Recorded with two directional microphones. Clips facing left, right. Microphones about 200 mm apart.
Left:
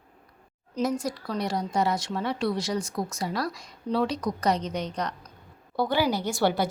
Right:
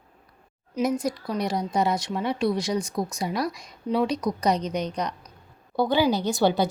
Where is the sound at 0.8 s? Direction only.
15° right (ahead or behind).